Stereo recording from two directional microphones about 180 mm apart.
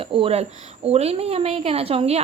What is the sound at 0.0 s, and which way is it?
A woman's voice, 30° right (ahead or behind).